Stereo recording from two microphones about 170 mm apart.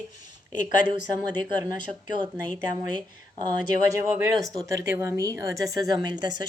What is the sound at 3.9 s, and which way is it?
Speech, 15° right (ahead or behind).